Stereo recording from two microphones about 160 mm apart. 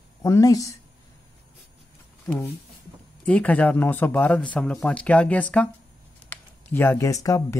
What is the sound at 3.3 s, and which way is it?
Speech, 10° left (ahead or behind).